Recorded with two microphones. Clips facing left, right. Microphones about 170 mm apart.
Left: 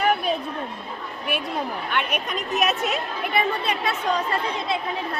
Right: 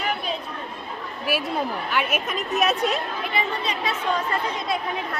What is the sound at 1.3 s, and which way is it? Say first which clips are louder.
A woman's voice: right 2 dB; 5° right (ahead or behind).